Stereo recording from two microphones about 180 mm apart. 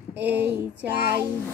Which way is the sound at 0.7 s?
70° right (ahead or behind).